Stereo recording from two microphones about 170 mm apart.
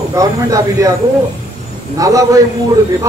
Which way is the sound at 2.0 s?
20° right (ahead or behind).